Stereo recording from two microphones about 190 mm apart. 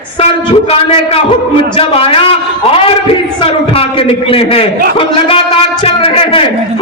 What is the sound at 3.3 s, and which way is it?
A man's voice, 30° left (ahead or behind).